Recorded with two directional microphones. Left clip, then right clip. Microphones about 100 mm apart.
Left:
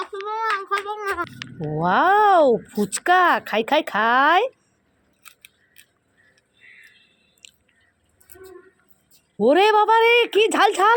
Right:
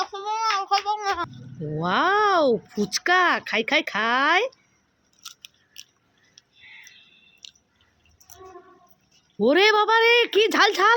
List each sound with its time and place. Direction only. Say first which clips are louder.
0.0 s child singing: even; 20° right (ahead or behind)
0.9 s speech: right 2 dB; 10° right (ahead or behind)
1.7 s speech: left 4 dB; 5° left (ahead or behind)
9.4 s speech: left 2 dB; 5° right (ahead or behind)